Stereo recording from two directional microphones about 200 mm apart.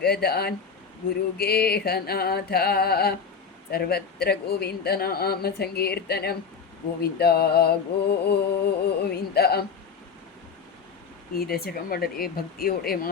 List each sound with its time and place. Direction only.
0.0 s speech: 50° left (ahead or behind)
11.3 s speech: 50° left (ahead or behind)